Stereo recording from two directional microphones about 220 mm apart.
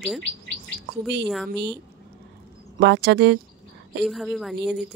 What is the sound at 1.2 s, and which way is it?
Speech, centre (ahead or behind).